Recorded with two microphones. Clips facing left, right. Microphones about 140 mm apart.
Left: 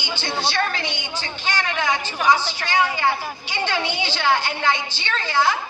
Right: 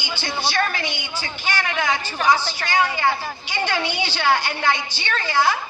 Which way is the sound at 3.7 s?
15° left (ahead or behind).